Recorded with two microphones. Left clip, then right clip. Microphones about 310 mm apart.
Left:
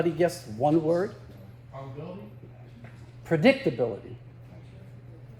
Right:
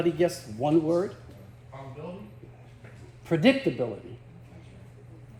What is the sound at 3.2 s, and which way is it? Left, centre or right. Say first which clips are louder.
Speech: left 1 dB; left.